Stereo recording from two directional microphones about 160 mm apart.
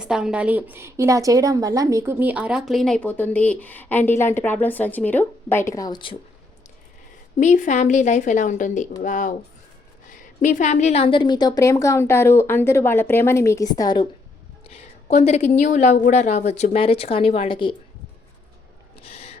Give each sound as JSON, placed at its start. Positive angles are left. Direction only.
{"t": 0.0, "sound": "a woman's voice", "side_deg": -5}
{"t": 7.3, "sound": "a woman's voice", "side_deg": 50}
{"t": 10.4, "sound": "a woman's voice", "side_deg": 50}
{"t": 14.7, "sound": "a woman's voice", "side_deg": 40}
{"t": 19.0, "sound": "a sound", "side_deg": 40}